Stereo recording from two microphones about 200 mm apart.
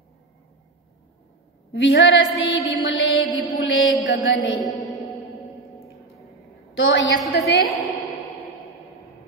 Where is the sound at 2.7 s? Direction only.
70° left (ahead or behind).